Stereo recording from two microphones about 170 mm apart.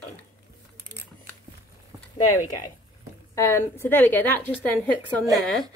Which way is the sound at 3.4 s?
15° left (ahead or behind).